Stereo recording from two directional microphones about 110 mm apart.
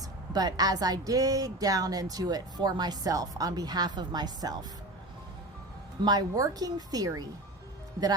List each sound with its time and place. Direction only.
0.3 s speech: 35° right (ahead or behind)
6.1 s speech: 35° right (ahead or behind)